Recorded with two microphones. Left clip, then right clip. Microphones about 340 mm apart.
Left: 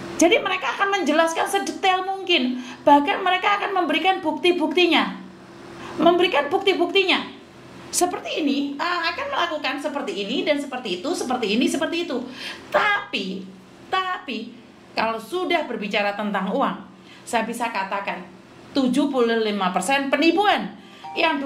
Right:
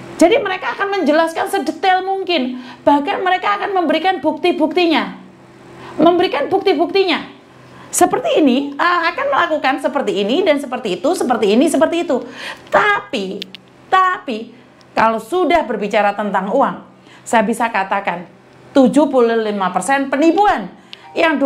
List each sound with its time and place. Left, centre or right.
0.2 s a woman's voice: right
8.0 s a woman's voice: right
17.3 s a woman's voice: right
18.7 s speech: right
19.1 s speech: right